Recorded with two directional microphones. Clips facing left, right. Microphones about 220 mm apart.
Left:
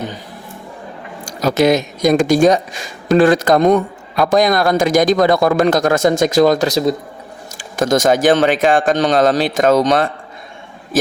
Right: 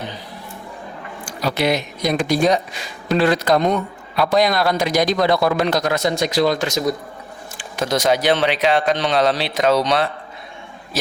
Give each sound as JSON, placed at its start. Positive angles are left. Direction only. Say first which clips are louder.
{"t": 1.2, "sound": "speech", "louder": "left 7 dB", "side_deg": 45}
{"t": 7.8, "sound": "speech", "louder": "left 5 dB", "side_deg": 45}